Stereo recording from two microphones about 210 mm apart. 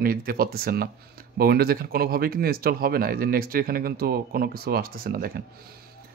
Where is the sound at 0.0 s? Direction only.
45° right (ahead or behind).